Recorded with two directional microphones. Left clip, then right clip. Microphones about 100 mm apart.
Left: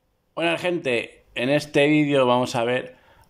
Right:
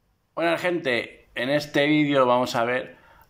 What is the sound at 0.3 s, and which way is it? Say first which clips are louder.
Speech: even; 15° left (ahead or behind).